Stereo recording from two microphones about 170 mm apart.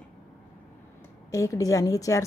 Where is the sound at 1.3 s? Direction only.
20° left (ahead or behind).